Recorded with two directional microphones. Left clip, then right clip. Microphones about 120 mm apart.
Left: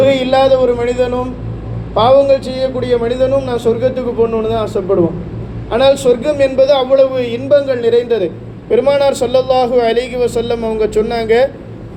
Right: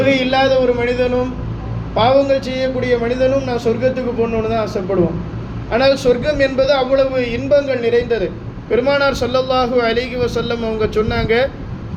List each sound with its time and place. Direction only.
0.0 s a man's voice: 30° left (ahead or behind)
5.7 s a man's voice: 35° left (ahead or behind)